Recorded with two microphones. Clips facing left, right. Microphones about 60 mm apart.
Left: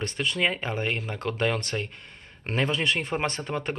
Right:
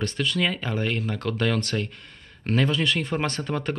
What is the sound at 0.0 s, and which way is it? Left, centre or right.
Speech, left.